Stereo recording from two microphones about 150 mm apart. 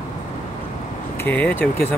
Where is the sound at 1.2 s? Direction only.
10° left (ahead or behind).